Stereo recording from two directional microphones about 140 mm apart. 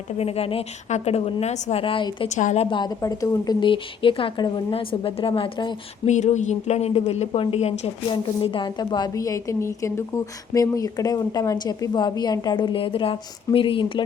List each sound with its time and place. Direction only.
0.2 s a woman's voice: 45° left (ahead or behind)
2.3 s a woman's voice: 55° left (ahead or behind)
2.6 s a woman's voice: 35° left (ahead or behind)
6.1 s a woman's voice: 55° left (ahead or behind)
8.1 s a woman's voice: 35° left (ahead or behind)